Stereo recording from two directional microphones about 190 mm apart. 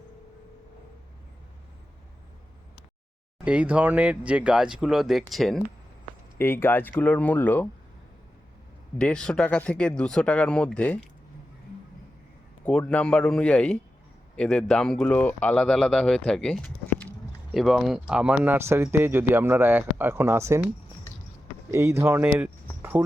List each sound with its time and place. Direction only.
3.4 s speech: 5° right (ahead or behind)
6.4 s speech: 10° left (ahead or behind)
9.0 s speech: 5° left (ahead or behind)
12.6 s speech: 5° left (ahead or behind); by 20.6 s 15° right (ahead or behind)
21.7 s speech: 15° right (ahead or behind)
22.8 s a sound: 10° right (ahead or behind)